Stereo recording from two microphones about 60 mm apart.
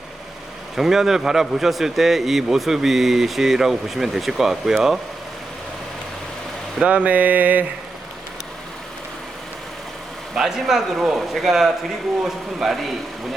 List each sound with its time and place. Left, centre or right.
0.8 s a man's voice: centre
6.8 s mantra: right
10.3 s a man's voice: centre